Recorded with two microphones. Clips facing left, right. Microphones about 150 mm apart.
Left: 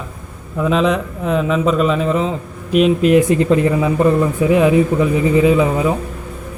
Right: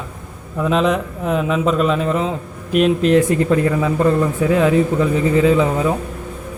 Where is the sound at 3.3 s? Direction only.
20° left (ahead or behind).